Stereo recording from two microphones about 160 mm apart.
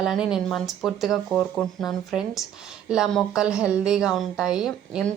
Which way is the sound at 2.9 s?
5° right (ahead or behind).